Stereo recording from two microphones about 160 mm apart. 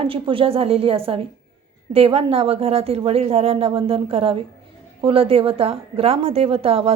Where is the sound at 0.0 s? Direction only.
35° right (ahead or behind).